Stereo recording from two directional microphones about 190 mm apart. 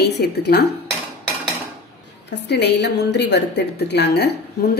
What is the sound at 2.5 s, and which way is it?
A woman's voice, 65° left (ahead or behind).